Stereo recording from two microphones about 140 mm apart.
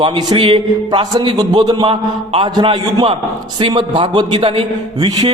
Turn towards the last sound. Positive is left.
turn(degrees=-30)  # may be behind; listen again after turning